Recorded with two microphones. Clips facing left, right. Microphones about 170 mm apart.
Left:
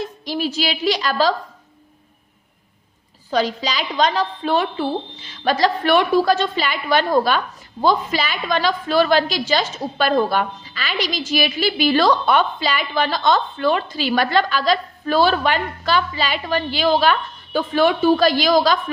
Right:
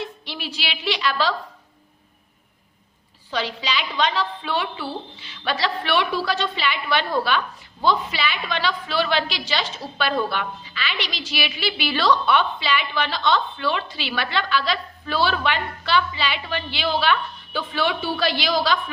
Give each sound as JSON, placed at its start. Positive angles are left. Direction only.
{"t": 0.0, "sound": "a woman's voice", "side_deg": 40}
{"t": 3.2, "sound": "a woman's voice", "side_deg": 45}